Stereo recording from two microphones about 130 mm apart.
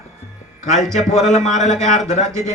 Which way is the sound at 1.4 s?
65° left (ahead or behind).